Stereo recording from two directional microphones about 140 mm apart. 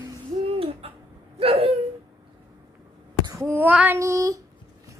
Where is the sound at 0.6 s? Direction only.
45° right (ahead or behind).